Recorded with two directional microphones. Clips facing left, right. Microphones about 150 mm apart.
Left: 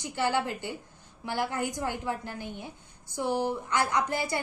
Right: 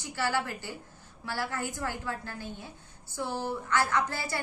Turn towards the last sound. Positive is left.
turn(degrees=20)  # may be behind; listen again after turning